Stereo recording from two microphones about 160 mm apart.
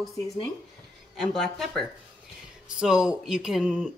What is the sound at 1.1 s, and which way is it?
Speech, centre (ahead or behind).